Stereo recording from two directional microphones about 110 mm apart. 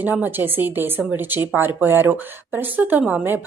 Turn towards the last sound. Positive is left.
turn(degrees=-10)  # may be behind; listen again after turning